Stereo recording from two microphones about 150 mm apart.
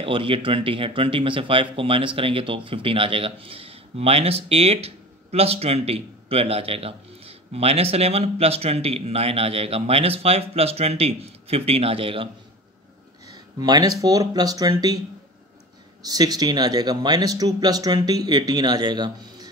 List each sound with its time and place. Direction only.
0.0 s speech: 35° right (ahead or behind)
13.3 s speech: 25° right (ahead or behind)
16.0 s speech: 25° right (ahead or behind)